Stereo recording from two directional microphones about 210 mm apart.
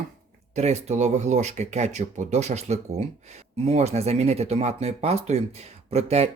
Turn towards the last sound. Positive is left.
turn(degrees=-30)  # may be behind; listen again after turning